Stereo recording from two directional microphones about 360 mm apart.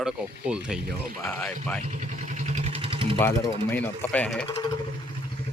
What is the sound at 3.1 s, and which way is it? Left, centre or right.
Speech, centre.